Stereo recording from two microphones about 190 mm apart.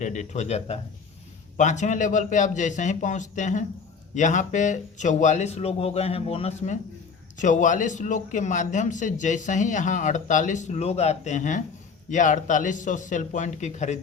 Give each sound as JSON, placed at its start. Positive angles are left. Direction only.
{"t": 0.0, "sound": "a man's voice", "side_deg": 40}